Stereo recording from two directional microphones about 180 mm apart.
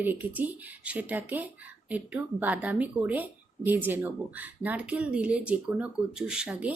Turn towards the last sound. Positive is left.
turn(degrees=-5)  # may be behind; listen again after turning